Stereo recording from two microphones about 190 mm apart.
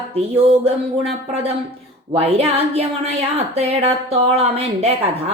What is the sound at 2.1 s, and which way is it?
Speech, 35° right (ahead or behind).